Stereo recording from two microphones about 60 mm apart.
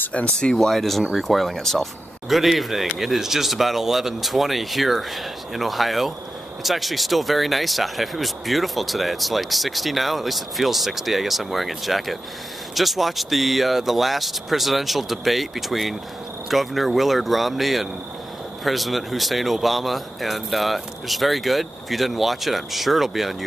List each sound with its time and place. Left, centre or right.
0.1 s speech: centre
0.6 s speech: centre